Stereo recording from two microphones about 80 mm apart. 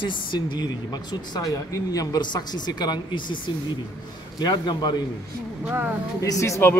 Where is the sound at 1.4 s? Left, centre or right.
Left.